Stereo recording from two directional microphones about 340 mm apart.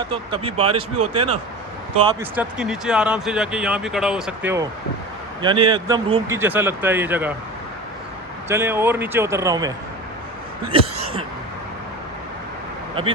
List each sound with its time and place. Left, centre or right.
0.0 s speech: centre
0.9 s speech: right
2.0 s speech: centre
8.4 s speech: centre
10.7 s a sound: centre